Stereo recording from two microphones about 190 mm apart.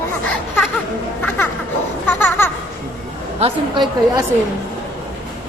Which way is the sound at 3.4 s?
20° right (ahead or behind).